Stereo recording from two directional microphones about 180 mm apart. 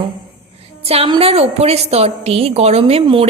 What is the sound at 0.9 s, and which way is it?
A woman's voice, 30° right (ahead or behind).